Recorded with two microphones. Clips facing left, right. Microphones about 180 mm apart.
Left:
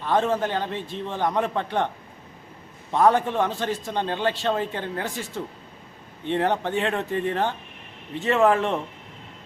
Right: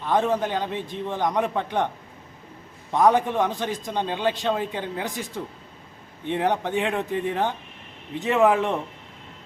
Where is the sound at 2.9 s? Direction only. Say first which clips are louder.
Even; 15° right (ahead or behind).